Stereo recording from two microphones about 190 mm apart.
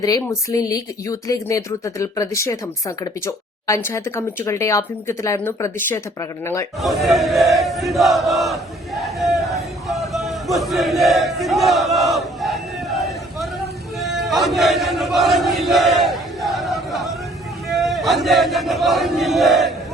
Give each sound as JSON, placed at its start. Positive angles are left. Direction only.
{"t": 0.0, "sound": "a woman's voice", "side_deg": 20}
{"t": 6.8, "sound": "battle cry", "side_deg": 0}
{"t": 9.0, "sound": "a sound", "side_deg": 0}
{"t": 14.0, "sound": "battle cry", "side_deg": 0}
{"t": 17.7, "sound": "speech", "side_deg": 0}